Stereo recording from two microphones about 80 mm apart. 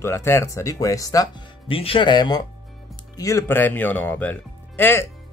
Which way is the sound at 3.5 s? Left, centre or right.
Left.